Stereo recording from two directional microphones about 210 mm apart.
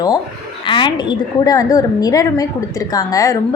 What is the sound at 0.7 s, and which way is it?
A woman's voice, 20° left (ahead or behind).